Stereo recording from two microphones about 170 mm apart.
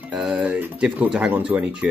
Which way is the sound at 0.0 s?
5° right (ahead or behind).